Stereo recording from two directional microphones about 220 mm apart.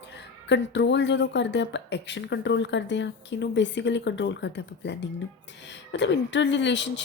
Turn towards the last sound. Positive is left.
turn(degrees=55)  # may be behind; listen again after turning